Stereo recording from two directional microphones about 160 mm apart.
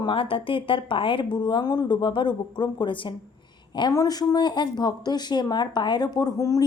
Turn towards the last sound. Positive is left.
turn(degrees=20)  # may be behind; listen again after turning